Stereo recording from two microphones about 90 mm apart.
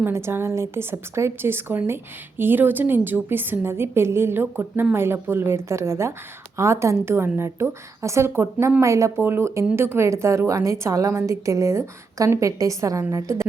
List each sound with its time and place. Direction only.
0.0 s a woman's voice: 30° right (ahead or behind)